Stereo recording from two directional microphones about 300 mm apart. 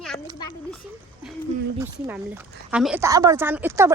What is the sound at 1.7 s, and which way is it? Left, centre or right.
Speech, centre.